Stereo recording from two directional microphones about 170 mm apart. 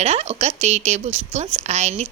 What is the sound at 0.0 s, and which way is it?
A woman's voice, 40° right (ahead or behind).